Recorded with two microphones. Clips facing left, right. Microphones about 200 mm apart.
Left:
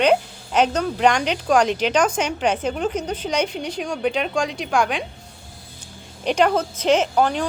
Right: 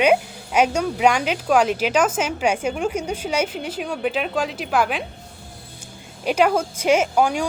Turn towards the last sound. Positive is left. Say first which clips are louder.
# even
turn(degrees=-10)  # may be behind; listen again after turning